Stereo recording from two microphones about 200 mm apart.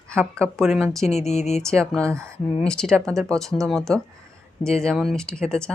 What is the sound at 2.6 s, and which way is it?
Speech, 5° left (ahead or behind).